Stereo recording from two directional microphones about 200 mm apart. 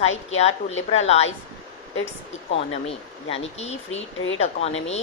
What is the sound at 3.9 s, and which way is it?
Speech, 70° left (ahead or behind).